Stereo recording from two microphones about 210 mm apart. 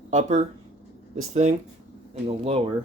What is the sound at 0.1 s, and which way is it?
Speech, 35° right (ahead or behind).